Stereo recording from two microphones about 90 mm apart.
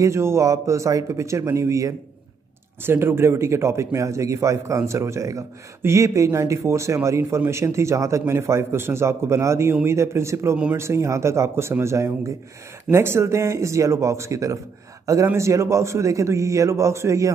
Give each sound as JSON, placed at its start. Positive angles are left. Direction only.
{"t": 0.0, "sound": "a man's voice", "side_deg": -30}
{"t": 2.8, "sound": "a man's voice", "side_deg": -25}